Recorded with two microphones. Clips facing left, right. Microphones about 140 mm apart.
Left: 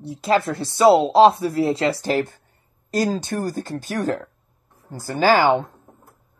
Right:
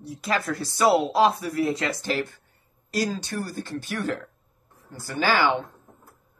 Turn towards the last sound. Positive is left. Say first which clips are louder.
# left 6 dB
turn(degrees=40)  # may be behind; listen again after turning